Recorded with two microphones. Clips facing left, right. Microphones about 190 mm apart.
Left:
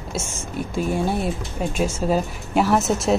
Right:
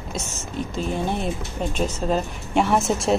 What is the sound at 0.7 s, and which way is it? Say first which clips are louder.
Speech: left 4 dB; 10° left (ahead or behind).